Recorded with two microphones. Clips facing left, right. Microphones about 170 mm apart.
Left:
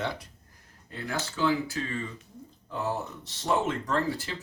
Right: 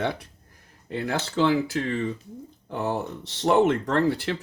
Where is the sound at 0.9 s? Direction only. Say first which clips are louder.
Right 6 dB; 75° right (ahead or behind).